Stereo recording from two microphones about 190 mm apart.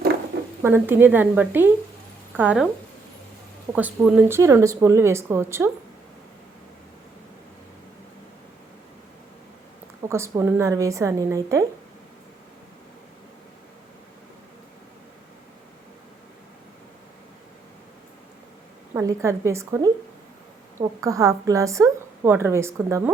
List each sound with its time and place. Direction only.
0.6 s a woman's voice: 10° right (ahead or behind)
3.7 s a woman's voice: 10° right (ahead or behind)
10.1 s a woman's voice: 15° right (ahead or behind)
18.9 s a woman's voice: 15° right (ahead or behind)
21.0 s a woman's voice: 15° right (ahead or behind)